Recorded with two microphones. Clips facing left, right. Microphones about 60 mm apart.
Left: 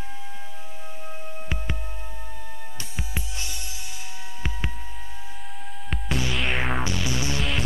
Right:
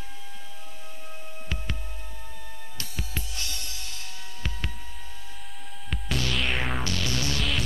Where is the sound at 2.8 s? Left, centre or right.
Centre.